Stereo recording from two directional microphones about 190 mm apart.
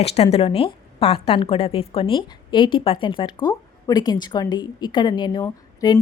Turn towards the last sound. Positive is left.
turn(degrees=15)  # may be behind; listen again after turning